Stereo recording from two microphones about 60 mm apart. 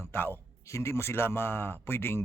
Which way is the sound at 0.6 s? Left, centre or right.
Left.